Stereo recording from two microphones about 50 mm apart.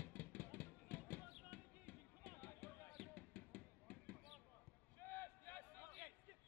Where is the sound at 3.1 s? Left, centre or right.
Left.